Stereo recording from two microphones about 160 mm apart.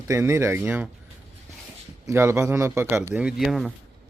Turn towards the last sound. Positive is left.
turn(degrees=0)  # may be behind; listen again after turning